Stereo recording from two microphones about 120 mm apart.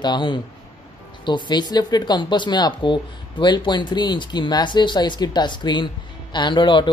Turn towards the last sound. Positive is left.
turn(degrees=40)  # may be behind; listen again after turning